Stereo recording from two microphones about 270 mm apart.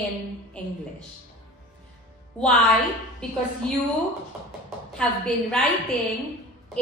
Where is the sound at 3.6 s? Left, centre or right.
Centre.